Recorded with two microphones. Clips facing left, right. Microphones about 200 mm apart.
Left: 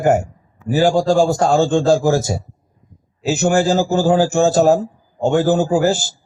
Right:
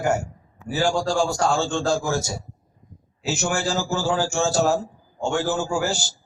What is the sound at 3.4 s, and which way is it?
A man's voice, 60° left (ahead or behind).